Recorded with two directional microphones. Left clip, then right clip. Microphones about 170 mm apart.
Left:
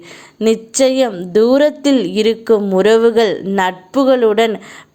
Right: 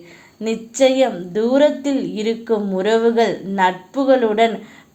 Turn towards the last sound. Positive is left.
turn(degrees=40)  # may be behind; listen again after turning